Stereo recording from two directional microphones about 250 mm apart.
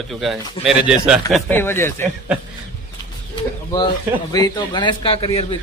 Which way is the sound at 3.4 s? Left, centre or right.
Centre.